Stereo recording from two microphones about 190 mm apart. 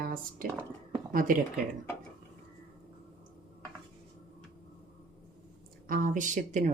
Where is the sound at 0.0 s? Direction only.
45° right (ahead or behind).